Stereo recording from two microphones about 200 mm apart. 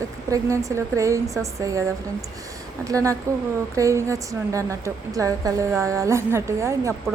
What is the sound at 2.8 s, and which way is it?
A woman's voice, 15° right (ahead or behind).